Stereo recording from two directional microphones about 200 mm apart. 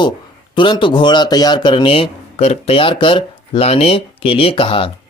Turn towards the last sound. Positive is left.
turn(degrees=25)  # may be behind; listen again after turning